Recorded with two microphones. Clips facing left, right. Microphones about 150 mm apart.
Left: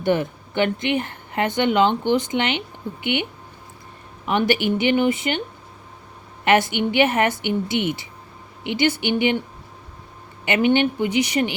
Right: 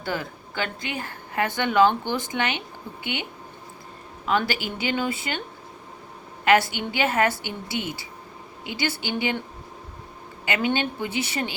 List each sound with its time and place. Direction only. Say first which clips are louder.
0.0 s a woman's voice: left 9 dB; 20° left (ahead or behind)
4.3 s a woman's voice: left 5 dB; 20° left (ahead or behind)
6.4 s a woman's voice: left 2 dB; 20° left (ahead or behind)
10.4 s a woman's voice: left 7 dB; 20° left (ahead or behind)